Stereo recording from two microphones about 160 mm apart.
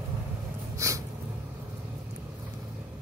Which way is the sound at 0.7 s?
20° right (ahead or behind).